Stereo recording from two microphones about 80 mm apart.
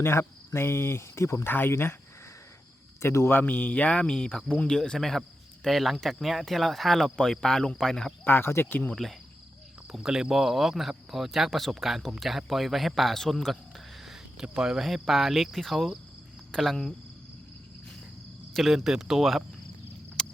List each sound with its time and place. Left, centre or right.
0.0 s speech: left
3.0 s speech: left; by 8.1 s centre
8.2 s speech: left
9.9 s speech: centre
18.5 s speech: centre
20.2 s a sound: centre